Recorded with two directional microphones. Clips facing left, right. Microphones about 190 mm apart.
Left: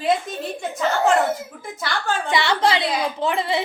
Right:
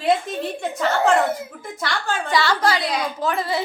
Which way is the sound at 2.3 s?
20° left (ahead or behind).